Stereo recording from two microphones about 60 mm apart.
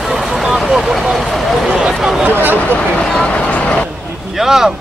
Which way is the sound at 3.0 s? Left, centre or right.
Centre.